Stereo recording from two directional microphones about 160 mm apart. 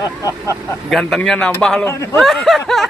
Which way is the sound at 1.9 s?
20° left (ahead or behind).